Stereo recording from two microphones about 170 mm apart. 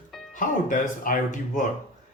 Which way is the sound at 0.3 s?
50° left (ahead or behind).